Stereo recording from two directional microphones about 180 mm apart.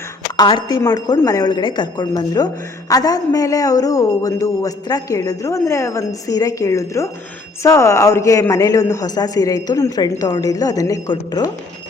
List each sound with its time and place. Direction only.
0.3 s a man's voice: 25° left (ahead or behind)